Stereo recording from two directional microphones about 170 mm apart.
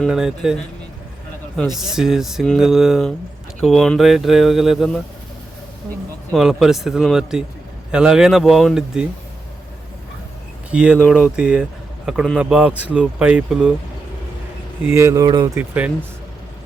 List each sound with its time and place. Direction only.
0.0 s speech: 5° right (ahead or behind)
1.5 s speech: centre (ahead or behind)
6.3 s speech: centre (ahead or behind)
10.7 s speech: 5° right (ahead or behind)
14.8 s speech: 15° right (ahead or behind)
15.5 s speech: 10° right (ahead or behind)